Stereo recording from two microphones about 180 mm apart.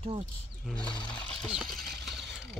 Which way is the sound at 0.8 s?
25° left (ahead or behind).